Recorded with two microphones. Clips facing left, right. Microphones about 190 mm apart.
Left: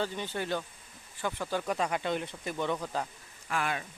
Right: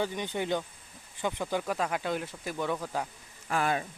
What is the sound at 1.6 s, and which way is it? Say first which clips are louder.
Speech: even; centre (ahead or behind).